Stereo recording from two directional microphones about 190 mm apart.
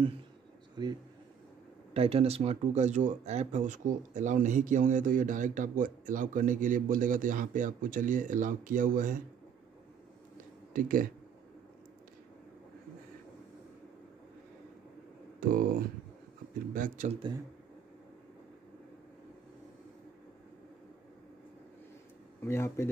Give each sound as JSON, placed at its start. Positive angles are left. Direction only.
{"t": 0.8, "sound": "a man's voice", "side_deg": -20}
{"t": 2.0, "sound": "speech", "side_deg": -30}
{"t": 10.7, "sound": "speech", "side_deg": -45}
{"t": 15.4, "sound": "speech", "side_deg": -45}
{"t": 16.7, "sound": "speech", "side_deg": -45}
{"t": 22.4, "sound": "speech", "side_deg": 15}